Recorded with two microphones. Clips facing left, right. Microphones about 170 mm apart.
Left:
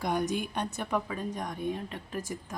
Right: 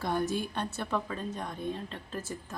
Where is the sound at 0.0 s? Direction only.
15° left (ahead or behind).